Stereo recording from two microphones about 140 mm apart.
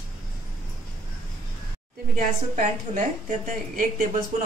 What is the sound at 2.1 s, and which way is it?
A woman's voice, 70° right (ahead or behind).